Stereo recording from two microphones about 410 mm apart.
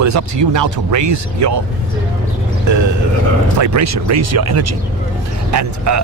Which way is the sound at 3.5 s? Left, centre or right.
Right.